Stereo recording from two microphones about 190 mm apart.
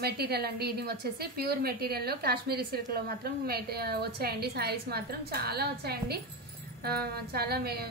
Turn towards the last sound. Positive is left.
turn(degrees=-55)  # may be behind; listen again after turning